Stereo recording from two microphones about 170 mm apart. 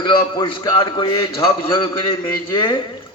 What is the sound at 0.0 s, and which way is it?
A man's voice, 25° left (ahead or behind).